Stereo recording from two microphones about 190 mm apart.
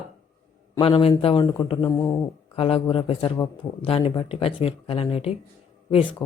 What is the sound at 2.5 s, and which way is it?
Speech, 30° left (ahead or behind).